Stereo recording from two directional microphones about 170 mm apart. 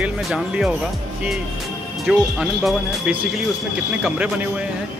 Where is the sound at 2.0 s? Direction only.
Centre (ahead or behind).